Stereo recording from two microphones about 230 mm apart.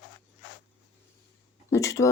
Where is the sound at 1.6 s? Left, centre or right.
Centre.